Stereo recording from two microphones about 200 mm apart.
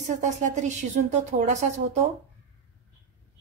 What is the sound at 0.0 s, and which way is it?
A woman's voice, 40° right (ahead or behind).